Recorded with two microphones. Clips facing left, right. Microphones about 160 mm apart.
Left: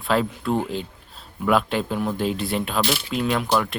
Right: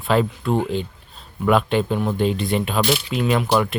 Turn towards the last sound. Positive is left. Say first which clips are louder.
# right 3 dB
turn(degrees=0)  # may be behind; listen again after turning